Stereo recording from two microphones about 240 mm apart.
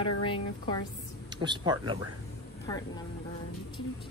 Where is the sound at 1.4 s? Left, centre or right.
Centre.